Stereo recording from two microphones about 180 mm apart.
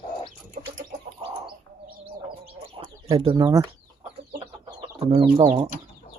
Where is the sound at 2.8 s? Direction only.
30° right (ahead or behind).